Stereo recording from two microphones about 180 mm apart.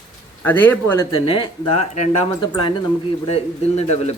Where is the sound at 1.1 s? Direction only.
25° left (ahead or behind).